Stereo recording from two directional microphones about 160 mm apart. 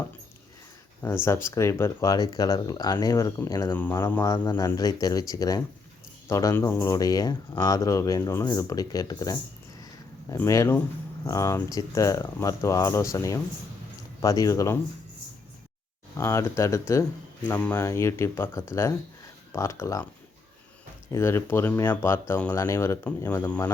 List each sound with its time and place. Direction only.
1.2 s speech: 15° left (ahead or behind)
16.1 s speech: 15° left (ahead or behind)
21.1 s speech: 15° left (ahead or behind)